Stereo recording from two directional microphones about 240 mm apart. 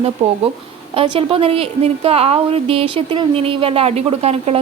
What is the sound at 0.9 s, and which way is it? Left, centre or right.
A woman's voice, right.